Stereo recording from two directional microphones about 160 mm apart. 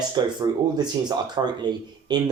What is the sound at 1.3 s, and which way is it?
Speech, 25° right (ahead or behind).